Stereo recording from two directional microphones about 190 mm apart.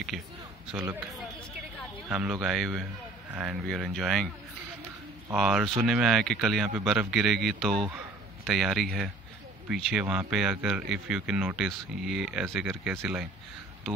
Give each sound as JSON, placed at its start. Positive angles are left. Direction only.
{"t": 0.1, "sound": "speech", "side_deg": 0}
{"t": 2.0, "sound": "speech", "side_deg": -5}
{"t": 5.3, "sound": "speech", "side_deg": -5}